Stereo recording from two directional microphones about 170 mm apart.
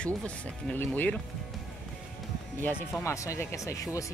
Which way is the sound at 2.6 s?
10° left (ahead or behind).